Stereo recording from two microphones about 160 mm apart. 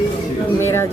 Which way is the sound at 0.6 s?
15° left (ahead or behind).